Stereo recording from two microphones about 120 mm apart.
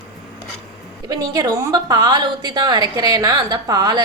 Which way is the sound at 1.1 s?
35° right (ahead or behind).